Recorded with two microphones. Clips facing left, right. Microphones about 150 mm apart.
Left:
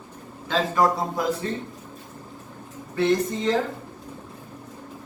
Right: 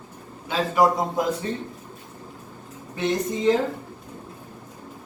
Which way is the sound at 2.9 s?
15° right (ahead or behind).